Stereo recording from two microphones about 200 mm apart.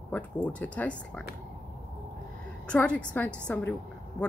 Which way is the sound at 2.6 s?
5° left (ahead or behind).